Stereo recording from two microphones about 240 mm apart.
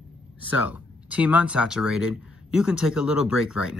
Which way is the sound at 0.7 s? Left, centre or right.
Centre.